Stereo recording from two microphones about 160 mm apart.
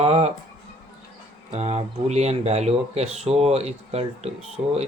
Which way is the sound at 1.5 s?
40° right (ahead or behind).